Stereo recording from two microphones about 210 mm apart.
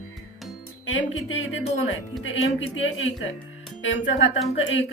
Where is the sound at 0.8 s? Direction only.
65° left (ahead or behind).